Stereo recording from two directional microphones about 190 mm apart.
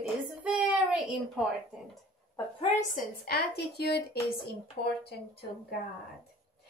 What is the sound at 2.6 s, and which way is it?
Speech, 35° left (ahead or behind).